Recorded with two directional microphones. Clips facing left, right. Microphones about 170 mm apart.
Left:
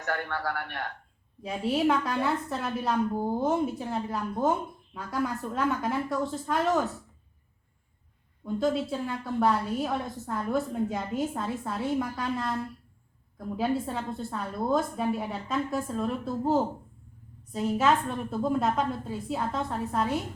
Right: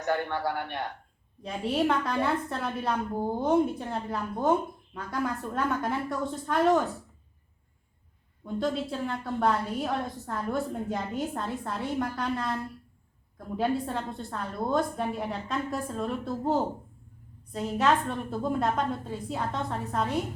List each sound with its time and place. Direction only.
0.0 s a man's voice: 20° right (ahead or behind)
1.4 s a woman's voice: centre (ahead or behind)
8.4 s a woman's voice: centre (ahead or behind)
13.6 s a woman's voice: centre (ahead or behind)